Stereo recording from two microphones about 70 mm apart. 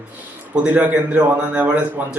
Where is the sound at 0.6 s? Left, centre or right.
Right.